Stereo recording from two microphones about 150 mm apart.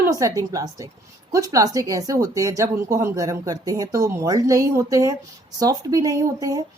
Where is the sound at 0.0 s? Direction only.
20° right (ahead or behind).